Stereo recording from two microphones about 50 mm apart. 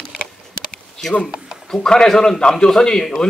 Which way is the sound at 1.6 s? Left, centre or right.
Centre.